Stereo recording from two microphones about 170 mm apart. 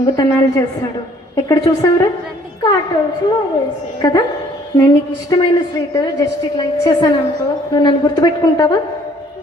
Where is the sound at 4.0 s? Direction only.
25° left (ahead or behind).